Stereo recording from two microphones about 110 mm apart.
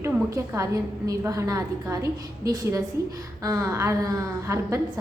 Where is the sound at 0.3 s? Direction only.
30° right (ahead or behind).